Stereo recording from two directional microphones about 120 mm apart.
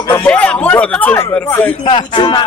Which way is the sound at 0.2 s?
10° left (ahead or behind).